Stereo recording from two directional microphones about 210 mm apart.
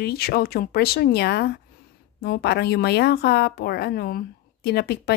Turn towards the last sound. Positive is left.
turn(degrees=50)  # may be behind; listen again after turning